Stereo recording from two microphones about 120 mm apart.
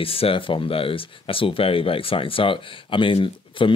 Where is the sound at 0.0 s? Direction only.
50° left (ahead or behind).